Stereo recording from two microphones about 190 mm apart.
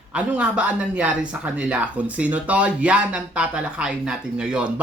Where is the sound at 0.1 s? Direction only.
5° right (ahead or behind).